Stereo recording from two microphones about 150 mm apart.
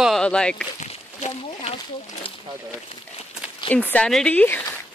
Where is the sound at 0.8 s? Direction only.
45° left (ahead or behind).